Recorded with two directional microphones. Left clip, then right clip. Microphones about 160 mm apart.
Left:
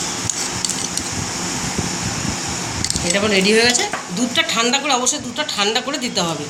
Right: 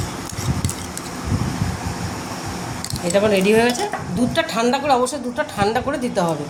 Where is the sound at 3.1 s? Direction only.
55° right (ahead or behind).